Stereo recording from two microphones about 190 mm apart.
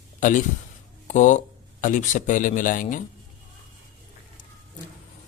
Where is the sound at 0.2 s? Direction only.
40° left (ahead or behind).